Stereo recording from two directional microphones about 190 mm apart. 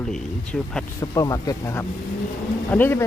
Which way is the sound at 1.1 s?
20° left (ahead or behind).